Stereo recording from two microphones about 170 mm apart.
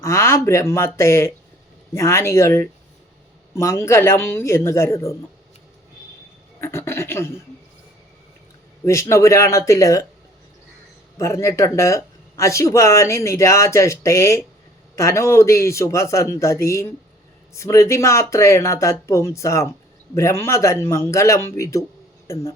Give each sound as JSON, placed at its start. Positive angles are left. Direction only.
{"t": 0.0, "sound": "speech", "side_deg": 15}
{"t": 6.6, "sound": "speech", "side_deg": 15}
{"t": 8.8, "sound": "speech", "side_deg": 15}
{"t": 11.2, "sound": "speech", "side_deg": 15}